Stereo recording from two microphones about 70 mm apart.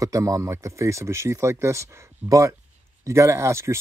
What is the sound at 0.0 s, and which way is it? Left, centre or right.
Speech, right.